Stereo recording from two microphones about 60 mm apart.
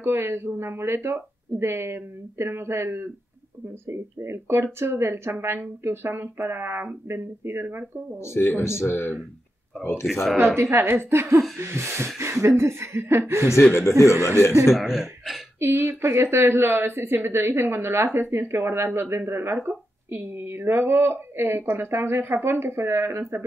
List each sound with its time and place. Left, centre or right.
0.0 s a woman's voice: right
8.2 s speech: left
10.3 s a woman's voice: right
13.7 s speech: left
14.1 s a woman's voice: right
14.7 s speech: centre
15.6 s a woman's voice: right